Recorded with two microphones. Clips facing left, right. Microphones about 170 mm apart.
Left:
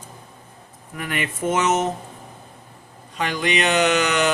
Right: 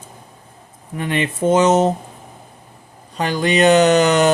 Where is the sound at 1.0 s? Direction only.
30° right (ahead or behind).